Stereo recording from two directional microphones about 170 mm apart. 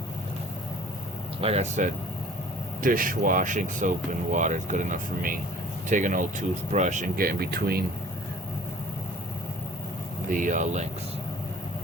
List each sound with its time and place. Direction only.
1.4 s speech: 40° right (ahead or behind)
2.8 s speech: 55° right (ahead or behind)
10.3 s speech: 50° right (ahead or behind)